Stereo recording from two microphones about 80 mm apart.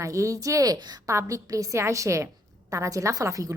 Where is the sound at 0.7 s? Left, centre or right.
Right.